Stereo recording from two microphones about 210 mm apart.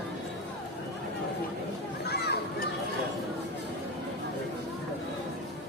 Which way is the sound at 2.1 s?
50° left (ahead or behind).